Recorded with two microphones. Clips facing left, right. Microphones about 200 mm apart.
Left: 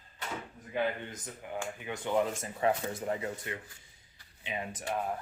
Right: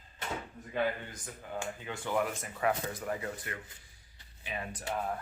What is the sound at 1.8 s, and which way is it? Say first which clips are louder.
Speech: left 3 dB; 20° left (ahead or behind).